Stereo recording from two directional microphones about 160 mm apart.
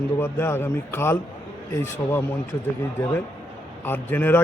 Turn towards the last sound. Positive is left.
turn(degrees=10)  # may be behind; listen again after turning